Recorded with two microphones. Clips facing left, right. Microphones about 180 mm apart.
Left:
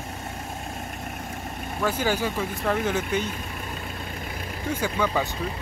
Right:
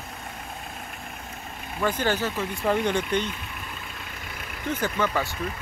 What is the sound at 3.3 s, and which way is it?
Vehicle, 40° left (ahead or behind).